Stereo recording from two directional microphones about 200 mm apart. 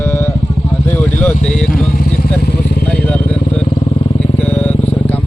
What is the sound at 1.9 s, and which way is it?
Vehicle, 50° left (ahead or behind).